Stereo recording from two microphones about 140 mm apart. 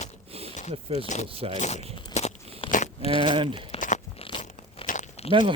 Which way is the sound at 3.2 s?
35° right (ahead or behind).